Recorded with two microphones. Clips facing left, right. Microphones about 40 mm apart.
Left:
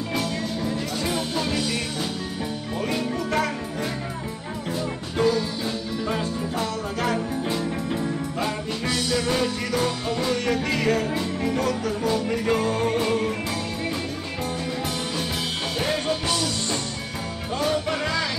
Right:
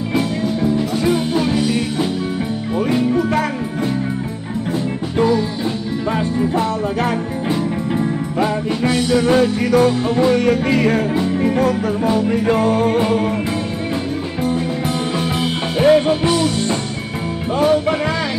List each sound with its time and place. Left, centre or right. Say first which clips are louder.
0.1 s music: right 9 dB; centre
6.1 s music: right 9 dB; right
15.8 s music: right 14 dB; right